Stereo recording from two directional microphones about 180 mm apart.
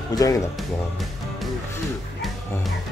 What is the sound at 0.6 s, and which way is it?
Music, centre (ahead or behind).